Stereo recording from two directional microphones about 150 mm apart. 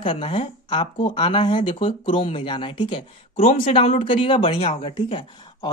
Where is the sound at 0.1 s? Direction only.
35° left (ahead or behind).